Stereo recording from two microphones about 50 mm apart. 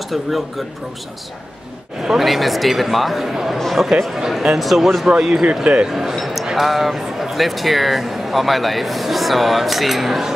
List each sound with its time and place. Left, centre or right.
2.0 s speech: centre
5.9 s speech: centre